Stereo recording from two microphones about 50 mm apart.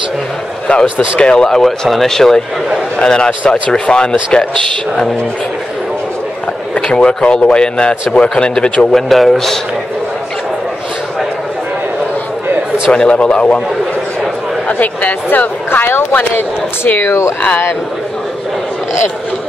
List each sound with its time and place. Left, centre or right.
0.9 s speech: left
6.9 s a man's voice: centre
8.9 s a man's voice: centre
12.9 s a man's voice: left
14.7 s a woman's voice: left